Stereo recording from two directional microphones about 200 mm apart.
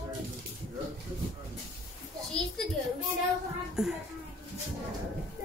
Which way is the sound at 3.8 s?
5° right (ahead or behind).